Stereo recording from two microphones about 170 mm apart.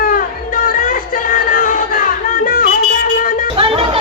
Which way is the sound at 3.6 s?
35° right (ahead or behind).